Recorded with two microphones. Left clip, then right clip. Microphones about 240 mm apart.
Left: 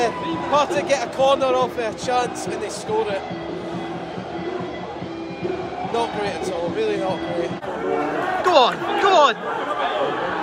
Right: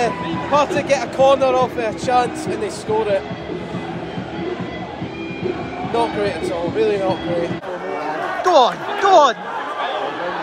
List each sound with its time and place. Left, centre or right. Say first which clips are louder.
0.0 s a man's voice: right 2 dB; centre
6.8 s speech: right 6 dB; centre
8.5 s speech: right 3 dB; centre